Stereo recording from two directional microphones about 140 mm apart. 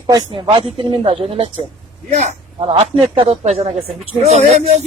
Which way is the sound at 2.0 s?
55° right (ahead or behind).